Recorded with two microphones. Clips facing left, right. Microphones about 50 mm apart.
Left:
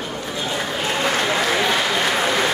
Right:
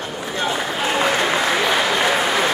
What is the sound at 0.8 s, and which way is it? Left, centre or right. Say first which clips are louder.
Applause: right 3 dB; centre.